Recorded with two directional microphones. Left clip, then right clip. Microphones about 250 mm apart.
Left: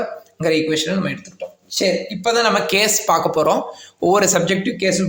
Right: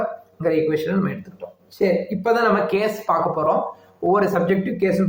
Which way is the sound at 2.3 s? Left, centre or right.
Left.